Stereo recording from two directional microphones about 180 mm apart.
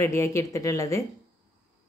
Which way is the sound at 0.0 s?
15° left (ahead or behind).